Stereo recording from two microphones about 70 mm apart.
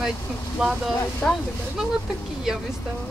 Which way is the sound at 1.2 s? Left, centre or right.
Centre.